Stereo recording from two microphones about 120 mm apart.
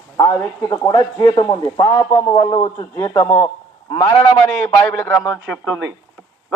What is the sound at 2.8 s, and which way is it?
Speech, 30° left (ahead or behind).